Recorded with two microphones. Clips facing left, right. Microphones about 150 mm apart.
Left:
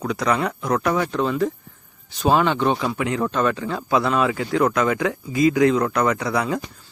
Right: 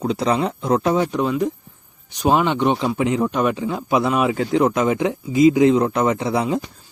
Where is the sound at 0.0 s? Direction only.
30° right (ahead or behind).